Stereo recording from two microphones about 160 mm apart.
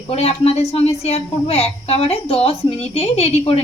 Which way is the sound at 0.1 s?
40° left (ahead or behind).